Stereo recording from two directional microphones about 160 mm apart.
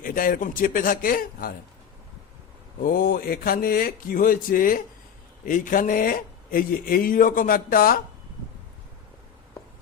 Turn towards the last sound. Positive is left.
turn(degrees=65)  # may be behind; listen again after turning